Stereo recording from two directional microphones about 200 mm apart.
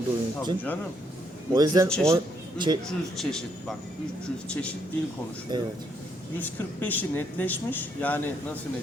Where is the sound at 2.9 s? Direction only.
Centre (ahead or behind).